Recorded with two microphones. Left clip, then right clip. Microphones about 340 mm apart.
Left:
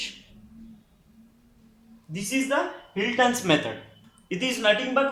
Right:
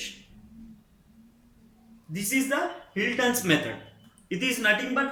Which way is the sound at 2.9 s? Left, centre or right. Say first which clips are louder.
Left 4 dB; centre.